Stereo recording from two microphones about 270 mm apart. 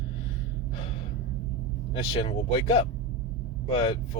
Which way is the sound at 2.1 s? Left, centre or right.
Centre.